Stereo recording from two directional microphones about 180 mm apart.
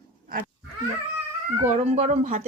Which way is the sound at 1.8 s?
40° right (ahead or behind).